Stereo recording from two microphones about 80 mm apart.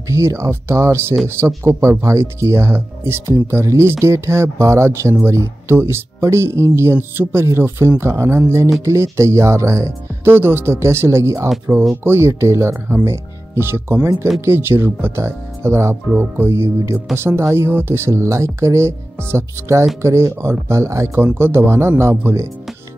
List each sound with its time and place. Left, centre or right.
0.1 s speech: right